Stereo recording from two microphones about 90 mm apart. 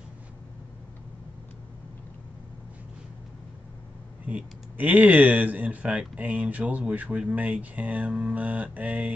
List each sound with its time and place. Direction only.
4.3 s speech: 15° right (ahead or behind)